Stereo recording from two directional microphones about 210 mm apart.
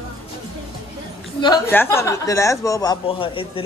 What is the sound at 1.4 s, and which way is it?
Speech, 15° left (ahead or behind).